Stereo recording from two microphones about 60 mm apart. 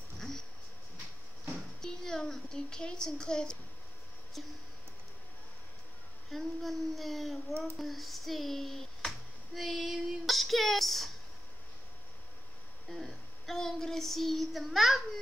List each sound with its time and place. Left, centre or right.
1.8 s a sound: centre
4.4 s speech: centre
6.3 s speech: centre
7.7 s a sound: centre
9.6 s female singing: centre
12.8 s child singing: centre